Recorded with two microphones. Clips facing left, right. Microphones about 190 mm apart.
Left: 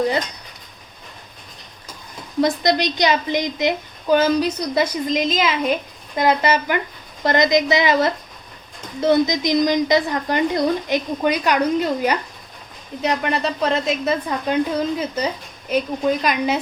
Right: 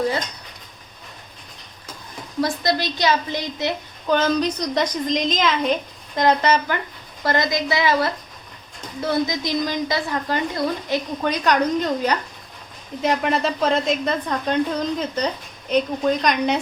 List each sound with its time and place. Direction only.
2.4 s a woman's voice: 20° left (ahead or behind)